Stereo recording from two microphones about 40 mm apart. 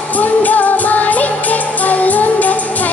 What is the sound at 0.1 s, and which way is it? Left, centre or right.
Music, left.